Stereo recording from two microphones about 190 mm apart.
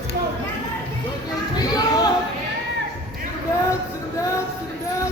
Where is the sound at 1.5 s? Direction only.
20° left (ahead or behind).